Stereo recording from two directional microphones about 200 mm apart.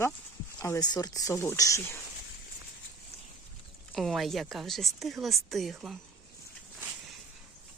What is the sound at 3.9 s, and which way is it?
Speech, centre (ahead or behind).